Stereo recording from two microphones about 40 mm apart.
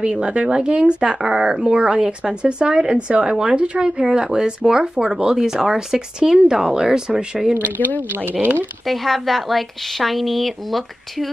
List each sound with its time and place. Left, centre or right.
0.0 s speech: right
7.5 s speech: right
8.4 s speech: right
8.8 s a woman's voice: centre